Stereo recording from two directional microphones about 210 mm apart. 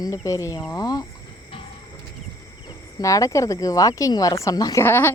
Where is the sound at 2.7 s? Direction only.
15° left (ahead or behind).